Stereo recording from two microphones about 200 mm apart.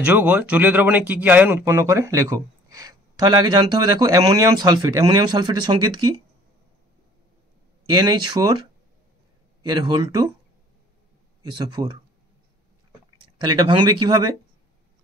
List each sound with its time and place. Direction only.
0.0 s a man's voice: 10° right (ahead or behind)
7.9 s speech: 20° right (ahead or behind)
11.4 s speech: 20° right (ahead or behind)
13.4 s speech: 20° right (ahead or behind)